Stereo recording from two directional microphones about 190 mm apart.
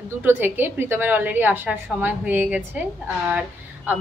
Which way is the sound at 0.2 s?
10° right (ahead or behind).